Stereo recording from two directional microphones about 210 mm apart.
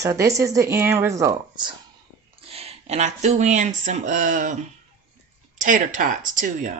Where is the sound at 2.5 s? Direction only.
30° right (ahead or behind).